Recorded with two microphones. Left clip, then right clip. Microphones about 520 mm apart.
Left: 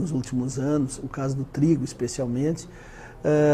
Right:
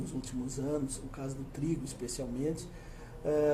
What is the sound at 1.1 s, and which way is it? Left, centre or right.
Speech, left.